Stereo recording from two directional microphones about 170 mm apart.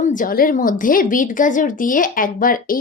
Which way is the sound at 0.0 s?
50° left (ahead or behind).